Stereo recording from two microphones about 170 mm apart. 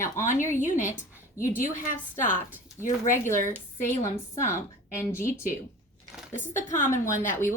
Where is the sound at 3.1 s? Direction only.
15° left (ahead or behind).